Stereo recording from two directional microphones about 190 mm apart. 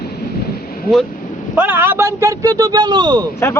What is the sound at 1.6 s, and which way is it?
A man's voice, 10° right (ahead or behind).